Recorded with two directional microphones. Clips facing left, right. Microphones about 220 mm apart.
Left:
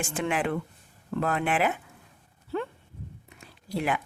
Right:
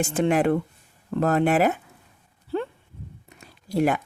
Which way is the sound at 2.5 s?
35° right (ahead or behind).